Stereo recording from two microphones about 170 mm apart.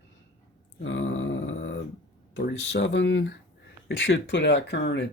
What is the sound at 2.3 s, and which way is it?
Speech, 90° left.